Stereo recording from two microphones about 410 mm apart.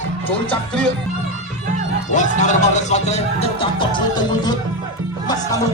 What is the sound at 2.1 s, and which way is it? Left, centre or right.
Speech, centre.